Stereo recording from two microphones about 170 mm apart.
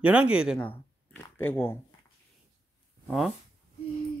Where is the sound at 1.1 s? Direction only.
15° left (ahead or behind).